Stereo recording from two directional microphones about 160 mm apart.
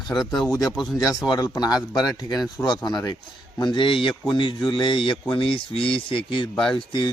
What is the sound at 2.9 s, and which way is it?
Speech, 25° left (ahead or behind).